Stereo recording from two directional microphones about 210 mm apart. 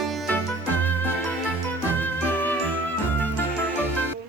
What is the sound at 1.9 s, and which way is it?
Music, 10° left (ahead or behind).